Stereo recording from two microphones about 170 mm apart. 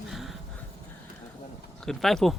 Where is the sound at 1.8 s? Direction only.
Centre (ahead or behind).